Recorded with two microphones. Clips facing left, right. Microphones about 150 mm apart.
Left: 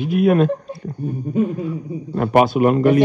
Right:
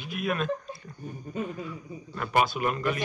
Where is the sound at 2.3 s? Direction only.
60° left (ahead or behind).